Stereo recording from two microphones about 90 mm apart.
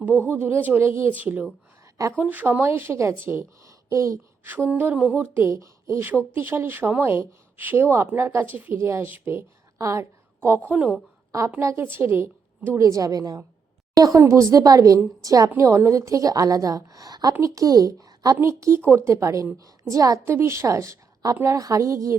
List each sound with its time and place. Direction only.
0.3 s a woman's voice: 25° right (ahead or behind)
4.4 s speech: 20° right (ahead or behind)
11.3 s a woman's voice: 35° right (ahead or behind)
18.3 s a woman's voice: 30° right (ahead or behind)